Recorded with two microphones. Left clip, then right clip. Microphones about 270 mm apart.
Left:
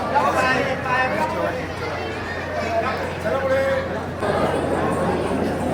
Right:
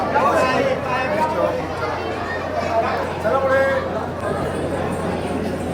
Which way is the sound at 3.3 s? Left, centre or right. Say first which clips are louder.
Right 3 dB; centre.